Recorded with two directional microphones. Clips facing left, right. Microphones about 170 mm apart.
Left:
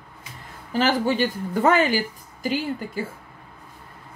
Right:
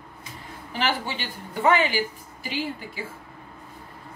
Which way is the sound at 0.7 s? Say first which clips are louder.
Left 7 dB; 40° left (ahead or behind).